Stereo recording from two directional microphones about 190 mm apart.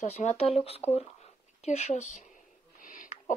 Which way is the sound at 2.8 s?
45° left (ahead or behind).